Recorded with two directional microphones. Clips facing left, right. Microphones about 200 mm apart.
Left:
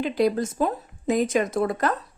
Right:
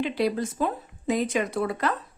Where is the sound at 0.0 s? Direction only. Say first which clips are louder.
Left 3 dB; 45° left (ahead or behind).